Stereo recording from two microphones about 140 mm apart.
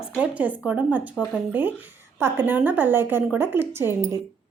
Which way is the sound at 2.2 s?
15° right (ahead or behind).